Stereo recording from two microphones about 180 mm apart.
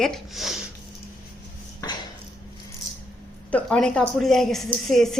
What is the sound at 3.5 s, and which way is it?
A woman's voice, 5° left (ahead or behind).